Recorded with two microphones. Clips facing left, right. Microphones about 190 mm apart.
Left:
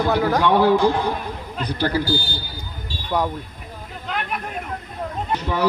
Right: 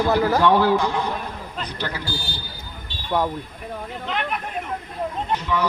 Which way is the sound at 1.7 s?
35° left (ahead or behind).